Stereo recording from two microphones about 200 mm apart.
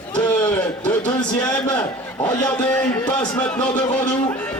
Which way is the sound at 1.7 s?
20° left (ahead or behind).